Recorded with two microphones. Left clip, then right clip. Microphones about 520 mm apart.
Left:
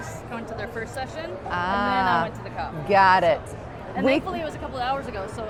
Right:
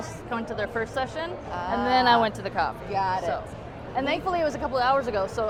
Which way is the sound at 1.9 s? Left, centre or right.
Right.